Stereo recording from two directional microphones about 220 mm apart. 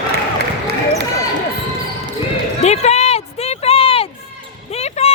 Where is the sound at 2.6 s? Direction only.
30° left (ahead or behind).